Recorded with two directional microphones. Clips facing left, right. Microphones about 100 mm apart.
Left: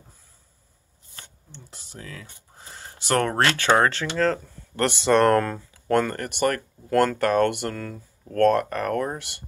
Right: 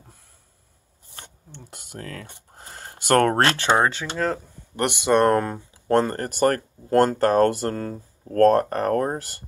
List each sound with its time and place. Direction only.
1.5 s speech: 55° right (ahead or behind)
3.3 s speech: 35° right (ahead or behind)
3.6 s speech: 15° right (ahead or behind); by 9.4 s 40° right (ahead or behind)